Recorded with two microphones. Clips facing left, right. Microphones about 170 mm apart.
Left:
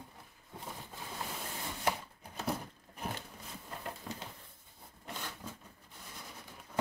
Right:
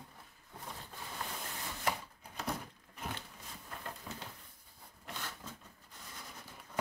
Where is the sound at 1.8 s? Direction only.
25° left (ahead or behind).